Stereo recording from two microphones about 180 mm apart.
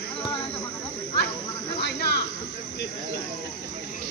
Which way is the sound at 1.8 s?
65° left (ahead or behind).